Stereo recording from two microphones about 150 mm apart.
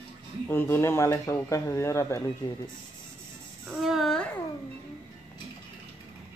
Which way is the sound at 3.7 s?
Centre (ahead or behind).